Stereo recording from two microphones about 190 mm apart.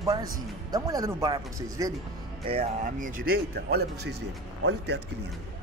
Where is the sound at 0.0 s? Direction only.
20° right (ahead or behind).